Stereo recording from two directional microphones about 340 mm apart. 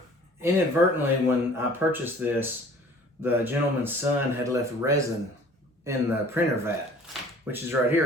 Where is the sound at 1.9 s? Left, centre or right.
Centre.